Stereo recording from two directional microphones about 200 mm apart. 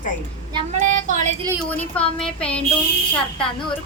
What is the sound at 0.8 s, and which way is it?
Child singing, 40° right (ahead or behind).